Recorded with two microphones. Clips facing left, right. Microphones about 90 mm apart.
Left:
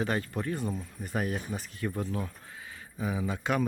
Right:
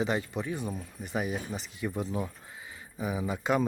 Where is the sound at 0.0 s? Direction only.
15° right (ahead or behind).